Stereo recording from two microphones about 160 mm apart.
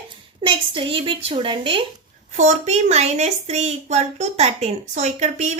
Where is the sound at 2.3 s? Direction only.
50° right (ahead or behind).